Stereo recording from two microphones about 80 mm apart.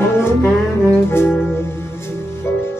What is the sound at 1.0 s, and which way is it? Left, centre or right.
Brass instrument, left.